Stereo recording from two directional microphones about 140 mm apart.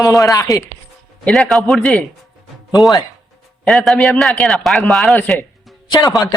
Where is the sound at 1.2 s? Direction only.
Centre (ahead or behind).